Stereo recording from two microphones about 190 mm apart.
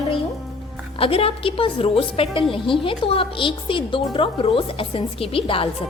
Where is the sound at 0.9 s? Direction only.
30° left (ahead or behind).